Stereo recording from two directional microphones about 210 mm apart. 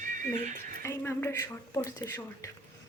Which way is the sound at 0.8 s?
15° left (ahead or behind).